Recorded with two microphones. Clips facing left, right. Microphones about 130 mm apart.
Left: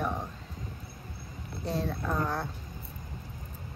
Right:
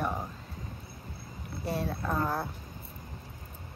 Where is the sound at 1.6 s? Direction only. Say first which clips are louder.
Even; 5° right (ahead or behind).